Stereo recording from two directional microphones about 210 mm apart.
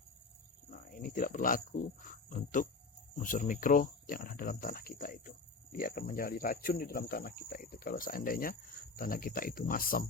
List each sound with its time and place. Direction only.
0.7 s speech: 45° left (ahead or behind)